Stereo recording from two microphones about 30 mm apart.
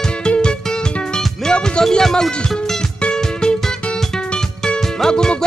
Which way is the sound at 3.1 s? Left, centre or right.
Left.